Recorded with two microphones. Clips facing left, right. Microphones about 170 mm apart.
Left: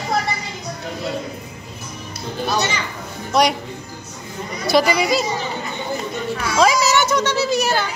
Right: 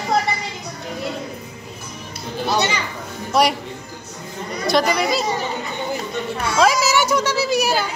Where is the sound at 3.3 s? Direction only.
5° right (ahead or behind).